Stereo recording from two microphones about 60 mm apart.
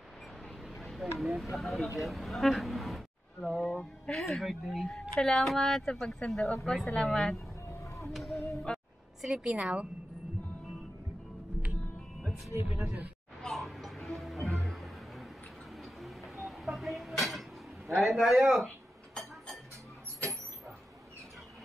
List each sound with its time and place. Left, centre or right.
0.7 s a woman's voice: centre
7.6 s a sound: left
8.1 s speech: centre
12.5 s speech: right
13.4 s vehicle: centre
14.2 s music: centre
15.8 s a sound: centre
18.0 s speech: centre
19.1 s chink: centre